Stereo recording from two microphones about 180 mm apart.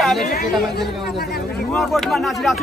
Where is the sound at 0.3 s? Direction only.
60° left (ahead or behind).